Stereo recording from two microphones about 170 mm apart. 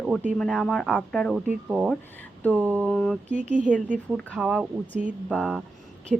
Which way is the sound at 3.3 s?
45° right (ahead or behind).